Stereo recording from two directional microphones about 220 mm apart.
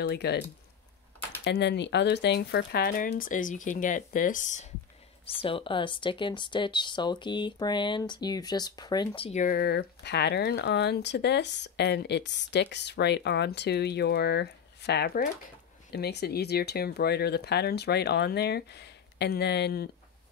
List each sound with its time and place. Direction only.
0.0 s speech: 50° left (ahead or behind)
1.4 s speech: 50° left (ahead or behind); by 4.6 s 35° left (ahead or behind)
5.3 s speech: 25° left (ahead or behind); by 19.9 s 45° left (ahead or behind)